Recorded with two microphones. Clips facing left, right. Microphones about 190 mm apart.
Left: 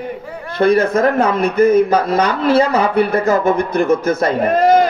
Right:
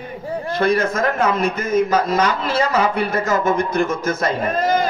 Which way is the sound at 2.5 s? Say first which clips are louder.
Left 2 dB; 35° left (ahead or behind).